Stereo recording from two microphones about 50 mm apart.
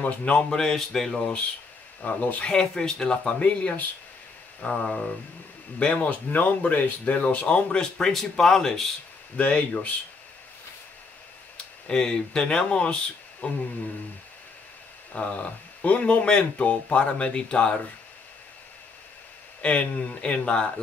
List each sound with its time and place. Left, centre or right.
0.0 s speech: left; by 1.3 s centre
2.0 s speech: left
2.5 s speech: centre
3.3 s speech: left
4.8 s speech: centre
6.3 s speech: left
7.8 s speech: centre
9.4 s speech: left
11.5 s a sound: centre
12.4 s speech: left
15.1 s speech: left
19.6 s speech: left